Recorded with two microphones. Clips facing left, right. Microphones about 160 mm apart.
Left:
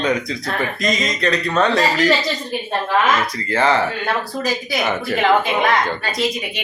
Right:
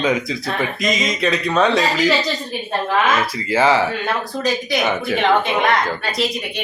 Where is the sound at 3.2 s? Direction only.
5° right (ahead or behind).